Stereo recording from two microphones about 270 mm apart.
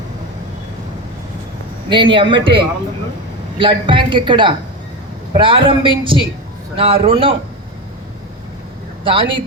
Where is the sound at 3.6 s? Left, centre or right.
Centre.